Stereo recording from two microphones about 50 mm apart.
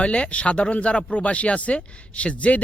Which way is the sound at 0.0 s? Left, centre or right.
Left.